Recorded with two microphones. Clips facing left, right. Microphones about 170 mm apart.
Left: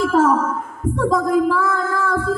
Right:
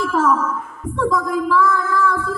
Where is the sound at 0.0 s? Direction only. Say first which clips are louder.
Left 2 dB; 45° left (ahead or behind).